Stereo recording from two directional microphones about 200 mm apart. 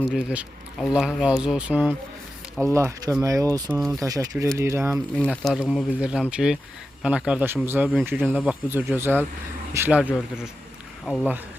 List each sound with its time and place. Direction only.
0.1 s speech: 5° right (ahead or behind)
5.1 s speech: 5° left (ahead or behind)